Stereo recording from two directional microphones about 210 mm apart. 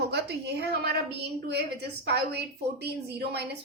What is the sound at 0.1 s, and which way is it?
Speech, 50° right (ahead or behind).